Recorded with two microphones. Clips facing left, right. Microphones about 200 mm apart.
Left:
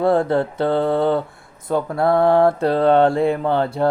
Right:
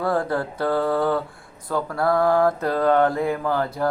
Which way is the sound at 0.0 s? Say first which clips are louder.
Left 6 dB; 25° left (ahead or behind).